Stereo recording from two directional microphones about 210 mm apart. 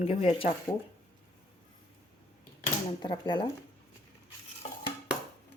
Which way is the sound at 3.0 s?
20° left (ahead or behind).